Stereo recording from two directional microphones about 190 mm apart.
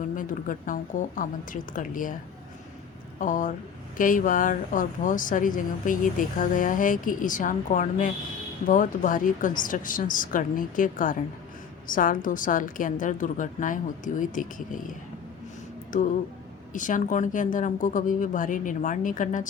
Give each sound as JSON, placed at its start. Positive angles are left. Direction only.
{"t": 0.2, "sound": "speech", "side_deg": 45}
{"t": 3.2, "sound": "speech", "side_deg": 45}
{"t": 15.9, "sound": "speech", "side_deg": 45}